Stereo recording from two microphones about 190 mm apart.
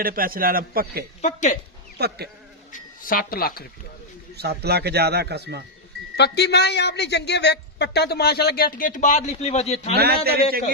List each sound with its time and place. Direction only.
0.0 s a man's voice: 50° right (ahead or behind)
1.2 s speech: 40° left (ahead or behind)
2.0 s speech: 60° right (ahead or behind)
2.7 s speech: 45° left (ahead or behind)
4.4 s speech: 55° right (ahead or behind)
6.1 s a man's voice: 60° left (ahead or behind); by 9.9 s 35° left (ahead or behind)
9.9 s speech: 55° right (ahead or behind)